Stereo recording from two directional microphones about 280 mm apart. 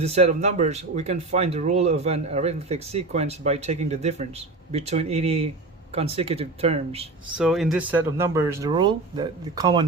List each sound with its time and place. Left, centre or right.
0.0 s speech: right
7.3 s speech: centre